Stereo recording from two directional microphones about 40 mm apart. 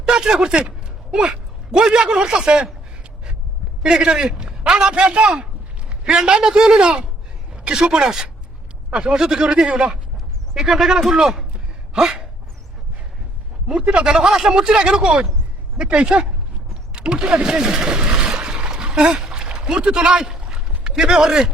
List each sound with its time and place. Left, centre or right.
0.0 s a man's voice: centre
3.8 s a man's voice: centre
10.5 s speech: centre
13.7 s a man's voice: right
16.9 s a sound: right
21.0 s speech: centre